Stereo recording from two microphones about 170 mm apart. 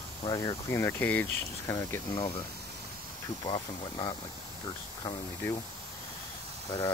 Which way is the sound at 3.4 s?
25° left (ahead or behind).